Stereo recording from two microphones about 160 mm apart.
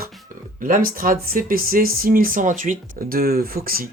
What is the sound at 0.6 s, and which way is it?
Speech, 60° right (ahead or behind).